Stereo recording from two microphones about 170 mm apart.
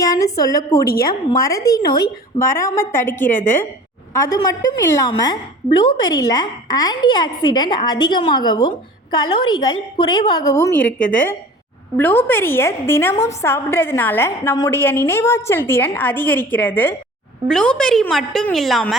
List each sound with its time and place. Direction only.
0.0 s a woman's voice: 20° left (ahead or behind)
2.7 s a woman's voice: 15° left (ahead or behind)
10.8 s a woman's voice: 10° left (ahead or behind)